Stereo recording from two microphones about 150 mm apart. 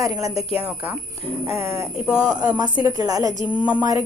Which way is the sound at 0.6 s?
10° right (ahead or behind).